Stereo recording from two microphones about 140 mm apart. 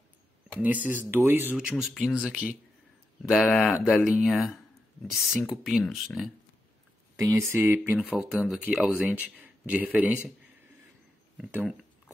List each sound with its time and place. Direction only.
0.6 s speech: 10° right (ahead or behind)
7.2 s speech: 20° right (ahead or behind)
8.0 s speech: 5° right (ahead or behind)